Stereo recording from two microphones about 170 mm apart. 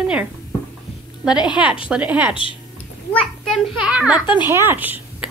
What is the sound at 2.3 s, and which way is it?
Speech, 30° left (ahead or behind).